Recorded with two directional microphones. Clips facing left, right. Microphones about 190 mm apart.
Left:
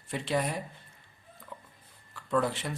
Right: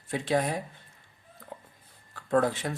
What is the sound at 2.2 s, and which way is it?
Speech, 45° right (ahead or behind).